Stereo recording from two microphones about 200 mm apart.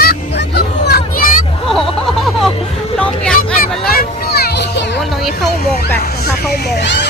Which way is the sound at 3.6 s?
50° left (ahead or behind).